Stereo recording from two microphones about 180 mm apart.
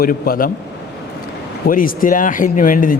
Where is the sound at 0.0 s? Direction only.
55° left (ahead or behind).